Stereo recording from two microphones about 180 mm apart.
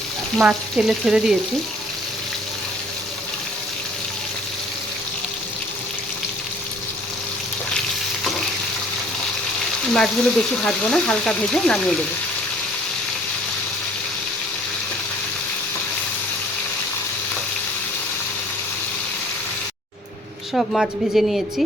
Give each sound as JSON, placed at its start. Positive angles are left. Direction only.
{"t": 0.3, "sound": "frying", "side_deg": -5}
{"t": 9.9, "sound": "frying", "side_deg": 5}
{"t": 20.5, "sound": "frying", "side_deg": 0}